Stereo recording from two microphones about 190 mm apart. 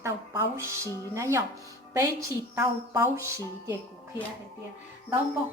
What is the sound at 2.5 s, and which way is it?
A woman's voice, 15° right (ahead or behind).